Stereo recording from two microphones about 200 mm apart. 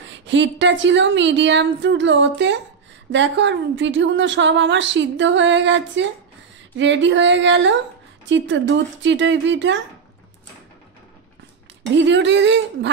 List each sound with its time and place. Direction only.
0.1 s a woman's voice: 65° right (ahead or behind)
12.1 s a woman's voice: 60° right (ahead or behind)